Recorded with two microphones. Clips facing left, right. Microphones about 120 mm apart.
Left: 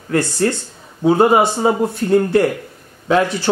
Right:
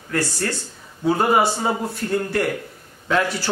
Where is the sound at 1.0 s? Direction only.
25° left (ahead or behind).